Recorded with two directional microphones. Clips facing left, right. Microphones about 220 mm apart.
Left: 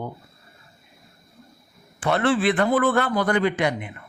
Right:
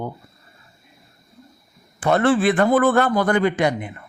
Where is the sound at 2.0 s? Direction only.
45° right (ahead or behind).